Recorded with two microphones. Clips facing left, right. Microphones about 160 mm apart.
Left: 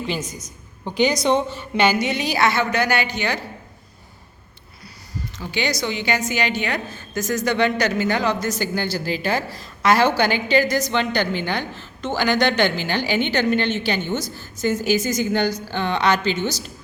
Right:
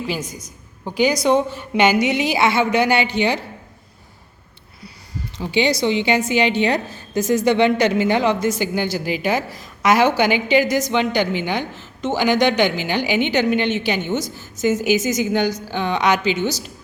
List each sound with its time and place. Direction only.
0.2 s a woman's voice: 55° right (ahead or behind)
0.9 s a woman's voice: 5° right (ahead or behind); by 3.4 s 25° right (ahead or behind)
5.4 s a woman's voice: 25° right (ahead or behind)